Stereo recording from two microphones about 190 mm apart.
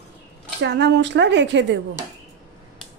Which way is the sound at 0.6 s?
65° right (ahead or behind).